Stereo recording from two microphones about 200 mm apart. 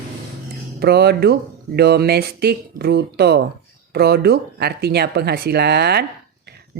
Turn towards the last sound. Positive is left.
turn(degrees=-55)  # may be behind; listen again after turning